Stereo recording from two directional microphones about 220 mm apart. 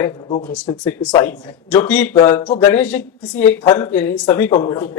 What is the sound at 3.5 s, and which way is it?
Speech, 15° left (ahead or behind).